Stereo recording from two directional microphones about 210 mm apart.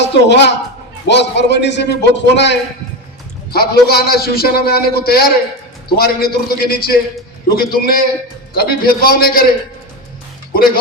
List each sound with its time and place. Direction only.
0.0 s a woman's voice: 55° left (ahead or behind)